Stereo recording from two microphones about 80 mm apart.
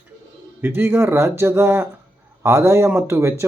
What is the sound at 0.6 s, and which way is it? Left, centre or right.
A man's voice, right.